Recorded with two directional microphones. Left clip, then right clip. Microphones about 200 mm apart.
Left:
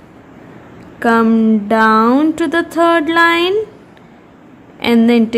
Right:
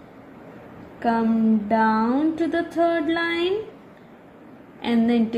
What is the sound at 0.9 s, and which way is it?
A woman's voice, 30° left (ahead or behind).